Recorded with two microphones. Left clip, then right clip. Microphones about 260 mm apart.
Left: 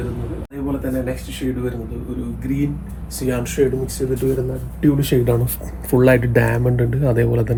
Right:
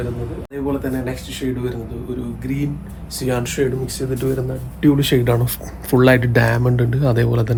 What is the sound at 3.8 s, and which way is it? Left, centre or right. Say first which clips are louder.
Speech: left 2 dB; centre.